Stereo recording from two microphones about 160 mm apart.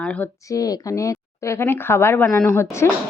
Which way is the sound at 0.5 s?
20° left (ahead or behind).